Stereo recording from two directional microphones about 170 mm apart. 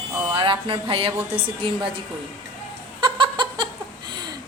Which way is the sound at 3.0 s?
30° right (ahead or behind).